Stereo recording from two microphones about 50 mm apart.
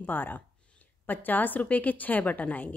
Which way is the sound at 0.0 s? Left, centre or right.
Left.